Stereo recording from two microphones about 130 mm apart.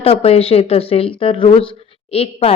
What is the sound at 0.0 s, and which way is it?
Speech, 50° left (ahead or behind).